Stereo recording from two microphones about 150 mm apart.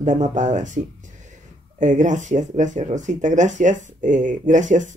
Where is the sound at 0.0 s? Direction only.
55° right (ahead or behind).